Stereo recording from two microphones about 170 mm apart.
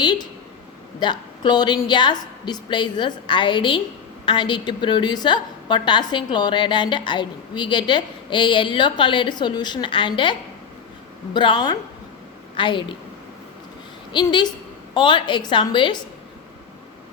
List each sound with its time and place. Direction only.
0.0 s a sound: 25° left (ahead or behind)
0.9 s a woman's voice: 25° left (ahead or behind)
11.3 s a woman's voice: 25° left (ahead or behind)
14.1 s a woman's voice: 25° left (ahead or behind)